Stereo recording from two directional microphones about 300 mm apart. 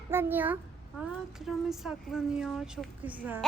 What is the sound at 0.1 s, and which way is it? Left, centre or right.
A child's voice, centre.